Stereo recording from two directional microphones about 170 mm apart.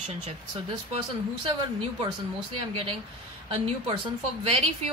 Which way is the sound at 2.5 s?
30° right (ahead or behind).